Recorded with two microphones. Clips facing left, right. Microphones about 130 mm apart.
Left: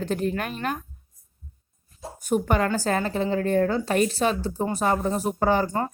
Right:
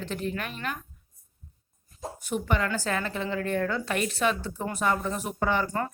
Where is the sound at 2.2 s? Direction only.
45° left (ahead or behind).